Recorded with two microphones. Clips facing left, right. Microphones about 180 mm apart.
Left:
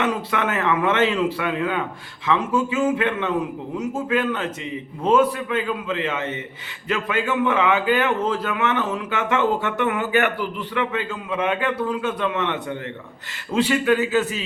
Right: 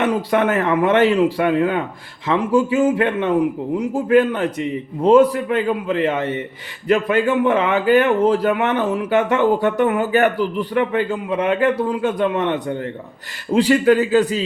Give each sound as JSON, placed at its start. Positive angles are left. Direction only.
{"t": 0.0, "sound": "a man's voice", "side_deg": -35}